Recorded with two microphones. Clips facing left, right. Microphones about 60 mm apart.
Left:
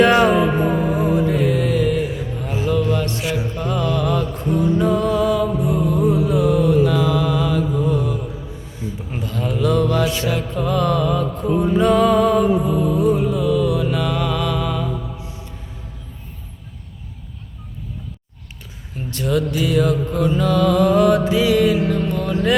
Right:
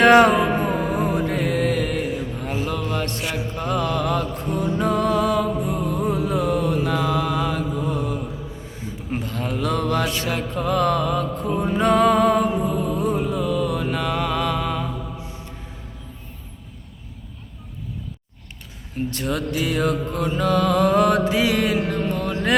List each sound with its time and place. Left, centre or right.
0.0 s mantra: right
0.3 s music: centre
0.7 s music: right
2.6 s mantra: right
11.8 s music: right
19.1 s music: right
19.5 s mantra: right